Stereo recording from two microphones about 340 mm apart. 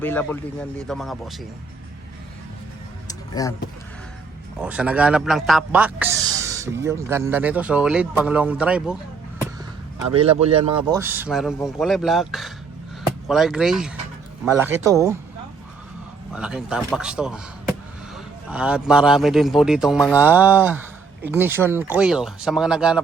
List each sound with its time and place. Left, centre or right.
0.0 s a man's voice: centre
3.1 s a sound: centre
4.6 s a man's voice: centre
10.1 s speech: centre
10.8 s a man's voice: centre
16.3 s a man's voice: centre